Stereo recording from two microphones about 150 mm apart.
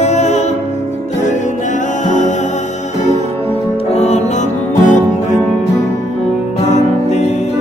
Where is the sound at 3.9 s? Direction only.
45° left (ahead or behind).